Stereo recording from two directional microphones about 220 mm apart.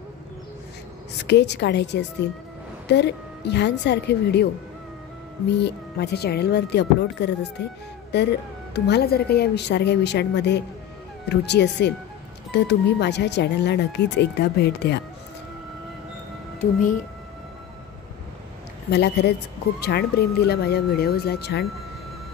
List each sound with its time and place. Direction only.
1.2 s speech: 50° left (ahead or behind)
5.6 s speech: 50° left (ahead or behind)
18.9 s speech: 50° left (ahead or behind)